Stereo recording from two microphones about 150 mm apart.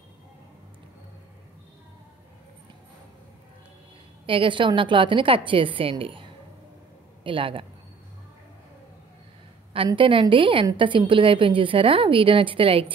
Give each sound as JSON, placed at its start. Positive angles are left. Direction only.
{"t": 4.3, "sound": "a woman's voice", "side_deg": -35}
{"t": 7.2, "sound": "a woman's voice", "side_deg": -35}
{"t": 9.8, "sound": "a woman's voice", "side_deg": -35}